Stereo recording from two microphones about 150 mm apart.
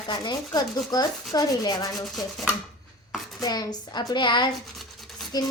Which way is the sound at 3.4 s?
25° left (ahead or behind).